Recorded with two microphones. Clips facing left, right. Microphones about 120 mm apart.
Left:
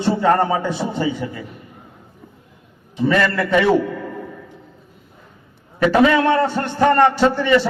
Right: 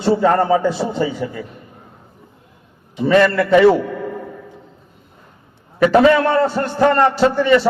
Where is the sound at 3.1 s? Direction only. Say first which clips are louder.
Right 5 dB; 25° right (ahead or behind).